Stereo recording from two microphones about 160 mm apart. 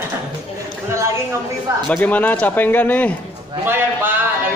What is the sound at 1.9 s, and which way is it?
A man's voice, 10° left (ahead or behind).